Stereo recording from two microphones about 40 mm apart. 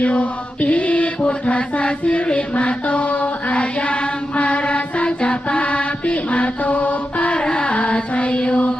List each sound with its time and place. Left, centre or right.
0.0 s mantra: left
1.5 s music: left
7.4 s carnatic music: left
8.4 s music: left